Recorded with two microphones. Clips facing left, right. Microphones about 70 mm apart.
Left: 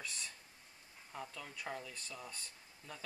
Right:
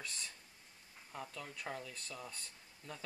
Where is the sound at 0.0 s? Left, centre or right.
Centre.